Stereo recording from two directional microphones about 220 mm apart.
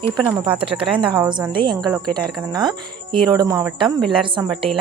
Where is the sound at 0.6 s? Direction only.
25° right (ahead or behind).